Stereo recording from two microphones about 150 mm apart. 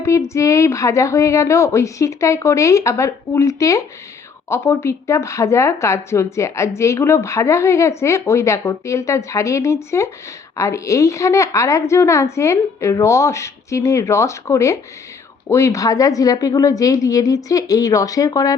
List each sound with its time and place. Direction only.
0.0 s speech: 20° left (ahead or behind)